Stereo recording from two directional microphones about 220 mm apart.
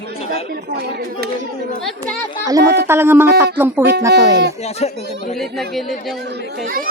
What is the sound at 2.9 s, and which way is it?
Music, 10° right (ahead or behind).